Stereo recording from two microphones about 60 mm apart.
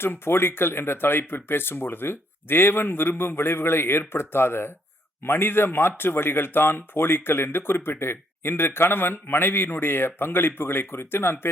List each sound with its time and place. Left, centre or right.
0.0 s speech: left